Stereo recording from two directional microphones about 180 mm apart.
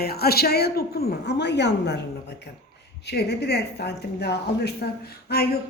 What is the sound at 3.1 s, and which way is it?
A woman's voice, 65° left (ahead or behind).